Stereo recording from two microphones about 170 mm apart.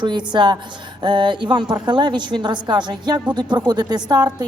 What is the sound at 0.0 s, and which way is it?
A man's voice, 25° right (ahead or behind).